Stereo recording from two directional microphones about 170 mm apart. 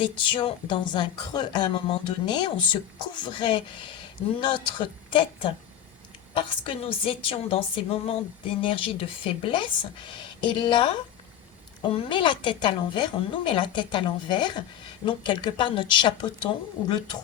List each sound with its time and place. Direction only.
0.0 s a woman's voice: 30° left (ahead or behind)